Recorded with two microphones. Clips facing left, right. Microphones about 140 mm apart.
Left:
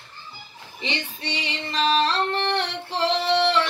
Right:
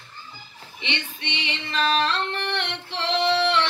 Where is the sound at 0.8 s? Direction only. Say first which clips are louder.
Left 2 dB; 40° left (ahead or behind).